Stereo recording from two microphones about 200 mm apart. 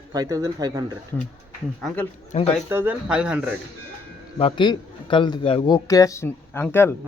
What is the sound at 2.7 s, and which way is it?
Speech, 10° right (ahead or behind).